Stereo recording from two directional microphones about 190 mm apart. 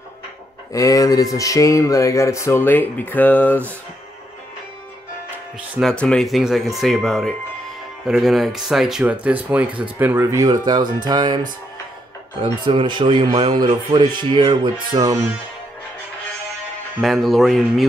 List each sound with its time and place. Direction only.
0.7 s speech: 15° left (ahead or behind)
5.8 s speech: 5° left (ahead or behind); by 15.1 s 20° right (ahead or behind)
17.0 s speech: centre (ahead or behind)